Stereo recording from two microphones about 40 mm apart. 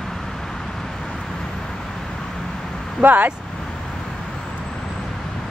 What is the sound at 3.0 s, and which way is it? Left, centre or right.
Speech, right.